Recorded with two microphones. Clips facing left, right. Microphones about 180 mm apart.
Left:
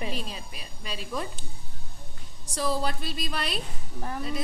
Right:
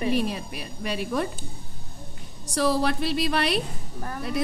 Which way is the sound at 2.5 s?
70° right (ahead or behind).